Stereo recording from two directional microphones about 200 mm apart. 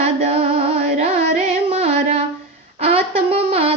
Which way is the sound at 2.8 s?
30° right (ahead or behind).